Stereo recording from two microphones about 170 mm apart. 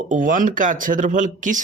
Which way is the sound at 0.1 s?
50° right (ahead or behind).